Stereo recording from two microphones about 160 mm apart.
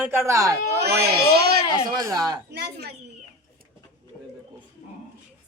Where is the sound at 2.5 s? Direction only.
90° right.